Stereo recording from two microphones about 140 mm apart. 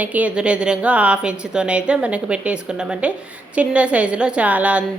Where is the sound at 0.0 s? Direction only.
10° right (ahead or behind).